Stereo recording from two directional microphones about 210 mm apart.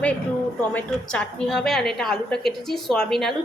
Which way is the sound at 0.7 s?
5° left (ahead or behind).